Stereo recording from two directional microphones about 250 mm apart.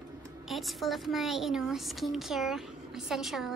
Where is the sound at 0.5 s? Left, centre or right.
Centre.